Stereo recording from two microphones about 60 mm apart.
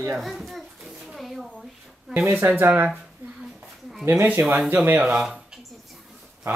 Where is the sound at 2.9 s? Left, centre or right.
Centre.